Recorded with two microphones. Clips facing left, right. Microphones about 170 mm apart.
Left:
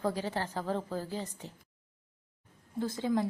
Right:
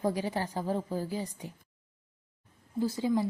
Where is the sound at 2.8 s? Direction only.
10° right (ahead or behind).